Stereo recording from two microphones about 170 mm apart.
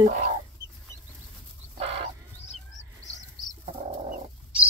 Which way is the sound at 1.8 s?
35° right (ahead or behind).